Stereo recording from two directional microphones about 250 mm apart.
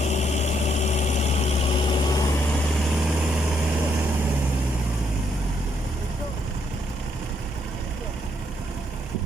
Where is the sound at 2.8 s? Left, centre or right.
Centre.